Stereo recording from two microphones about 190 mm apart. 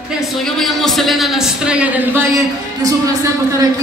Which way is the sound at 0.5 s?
Centre (ahead or behind).